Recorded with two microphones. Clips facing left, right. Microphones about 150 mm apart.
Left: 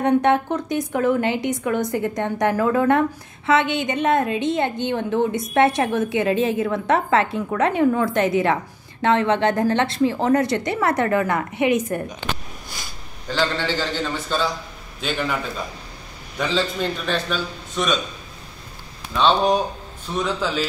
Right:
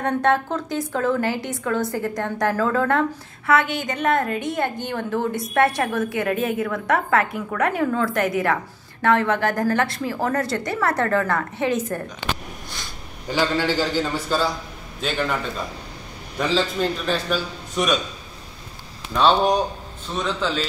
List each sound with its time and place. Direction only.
0.0 s a woman's voice: 20° left (ahead or behind)
13.3 s a man's voice: 10° right (ahead or behind)
16.3 s a man's voice: centre (ahead or behind)
19.1 s a man's voice: centre (ahead or behind)